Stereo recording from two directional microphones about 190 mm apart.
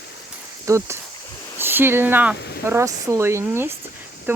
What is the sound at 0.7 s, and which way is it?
Speech, 15° right (ahead or behind).